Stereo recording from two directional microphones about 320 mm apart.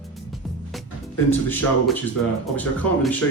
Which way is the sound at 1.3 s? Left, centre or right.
Centre.